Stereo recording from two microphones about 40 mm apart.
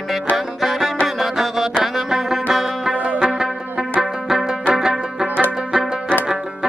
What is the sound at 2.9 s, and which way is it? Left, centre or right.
Music, right.